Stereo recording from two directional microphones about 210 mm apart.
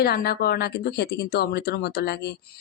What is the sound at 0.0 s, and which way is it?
Speech, 50° left (ahead or behind).